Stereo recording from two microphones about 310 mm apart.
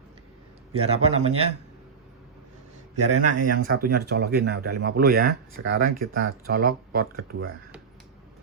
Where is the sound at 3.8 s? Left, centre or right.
Right.